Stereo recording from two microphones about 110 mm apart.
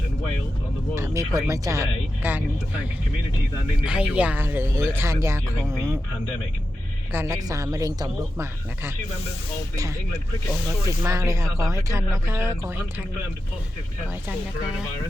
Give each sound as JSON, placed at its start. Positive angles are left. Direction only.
{"t": 0.9, "sound": "speech", "side_deg": -25}
{"t": 3.8, "sound": "speech", "side_deg": -10}
{"t": 7.1, "sound": "speech", "side_deg": -20}
{"t": 7.3, "sound": "speech", "side_deg": -30}
{"t": 11.0, "sound": "speech", "side_deg": -30}